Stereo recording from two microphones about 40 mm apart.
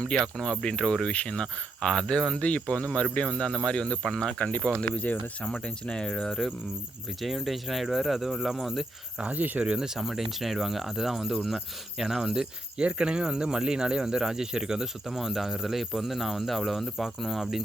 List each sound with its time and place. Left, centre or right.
0.2 s speech: centre
1.0 s speech: left
2.4 s speech: left
3.2 s speech: centre
4.8 s speech: left
7.2 s speech: centre
9.2 s speech: right
9.7 s speech: centre
12.7 s speech: right; by 17.5 s centre